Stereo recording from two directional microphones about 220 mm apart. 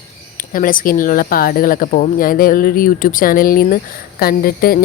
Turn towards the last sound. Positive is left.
turn(degrees=45)  # may be behind; listen again after turning